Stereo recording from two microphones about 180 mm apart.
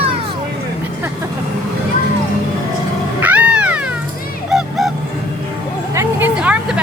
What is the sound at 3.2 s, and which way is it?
Cat, 10° right (ahead or behind).